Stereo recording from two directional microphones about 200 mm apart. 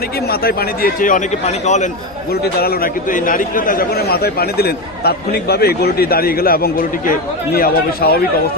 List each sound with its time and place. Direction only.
0.3 s a man's voice: 50° left (ahead or behind); by 1.9 s 35° left (ahead or behind)
2.3 s a man's voice: 50° left (ahead or behind)